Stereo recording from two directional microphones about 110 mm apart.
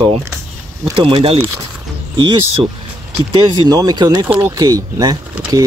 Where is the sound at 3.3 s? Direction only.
35° right (ahead or behind).